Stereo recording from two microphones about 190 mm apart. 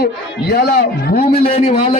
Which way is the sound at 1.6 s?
30° left (ahead or behind).